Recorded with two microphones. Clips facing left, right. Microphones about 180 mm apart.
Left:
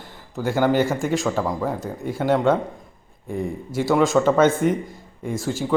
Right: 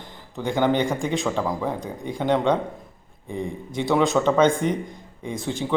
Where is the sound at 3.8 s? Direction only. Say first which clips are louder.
Left 2 dB; centre (ahead or behind).